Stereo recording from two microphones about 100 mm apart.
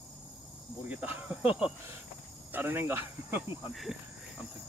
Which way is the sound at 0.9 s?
15° right (ahead or behind).